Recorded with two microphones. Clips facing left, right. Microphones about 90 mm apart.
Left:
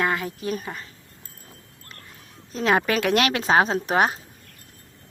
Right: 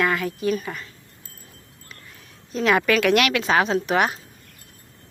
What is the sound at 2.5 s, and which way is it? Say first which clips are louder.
Speech: right 2 dB; 30° left (ahead or behind).